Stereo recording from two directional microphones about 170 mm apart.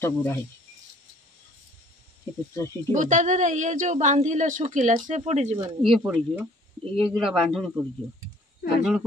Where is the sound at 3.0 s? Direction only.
45° right (ahead or behind).